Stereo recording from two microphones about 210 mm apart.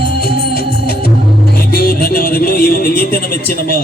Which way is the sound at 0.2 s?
45° left (ahead or behind).